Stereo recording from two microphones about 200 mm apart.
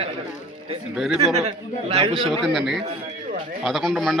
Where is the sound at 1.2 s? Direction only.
30° right (ahead or behind).